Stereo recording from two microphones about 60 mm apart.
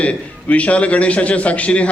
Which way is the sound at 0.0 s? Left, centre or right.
Left.